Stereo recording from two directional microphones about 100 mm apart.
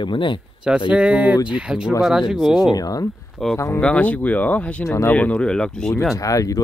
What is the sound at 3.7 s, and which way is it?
Speech, 15° left (ahead or behind).